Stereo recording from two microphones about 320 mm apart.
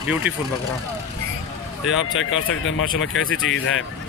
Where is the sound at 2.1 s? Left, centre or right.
Left.